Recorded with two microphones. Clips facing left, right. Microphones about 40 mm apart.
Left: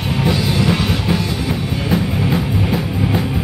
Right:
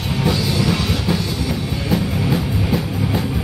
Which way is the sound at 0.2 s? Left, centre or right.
Centre.